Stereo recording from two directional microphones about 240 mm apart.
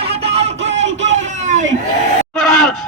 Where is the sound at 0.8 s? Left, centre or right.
Right.